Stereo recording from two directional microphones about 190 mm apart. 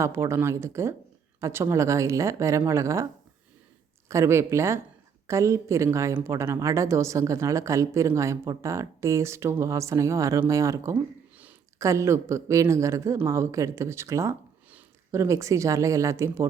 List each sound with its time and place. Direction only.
0.0 s a woman's voice: 15° right (ahead or behind)
4.1 s a woman's voice: 15° right (ahead or behind)